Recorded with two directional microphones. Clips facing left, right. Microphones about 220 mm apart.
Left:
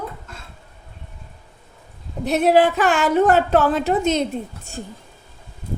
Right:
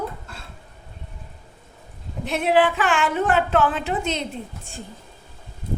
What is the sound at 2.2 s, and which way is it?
A woman's voice, 40° left (ahead or behind).